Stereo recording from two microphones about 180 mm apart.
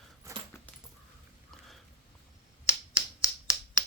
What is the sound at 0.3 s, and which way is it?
Dog, 15° right (ahead or behind).